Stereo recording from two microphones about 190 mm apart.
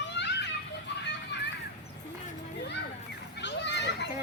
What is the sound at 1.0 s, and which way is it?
Music, 65° left (ahead or behind).